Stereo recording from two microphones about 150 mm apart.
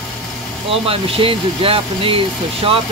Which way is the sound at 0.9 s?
40° right (ahead or behind).